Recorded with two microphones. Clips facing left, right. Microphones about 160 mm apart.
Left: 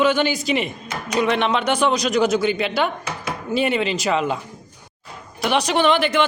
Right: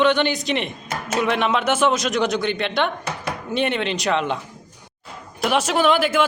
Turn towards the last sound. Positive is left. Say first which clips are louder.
# even
turn(degrees=-5)  # may be behind; listen again after turning